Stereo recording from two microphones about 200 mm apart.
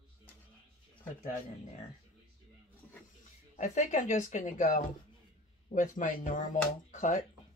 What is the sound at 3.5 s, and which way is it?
Speech, 40° left (ahead or behind).